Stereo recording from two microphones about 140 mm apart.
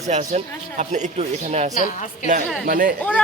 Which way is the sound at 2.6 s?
85° right.